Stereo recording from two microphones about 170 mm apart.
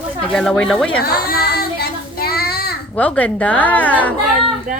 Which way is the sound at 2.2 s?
65° left (ahead or behind).